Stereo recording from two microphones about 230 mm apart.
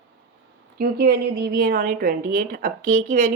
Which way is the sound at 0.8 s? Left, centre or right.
Right.